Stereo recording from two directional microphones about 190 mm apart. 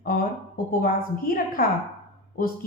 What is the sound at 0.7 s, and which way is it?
A woman's voice, 50° left (ahead or behind).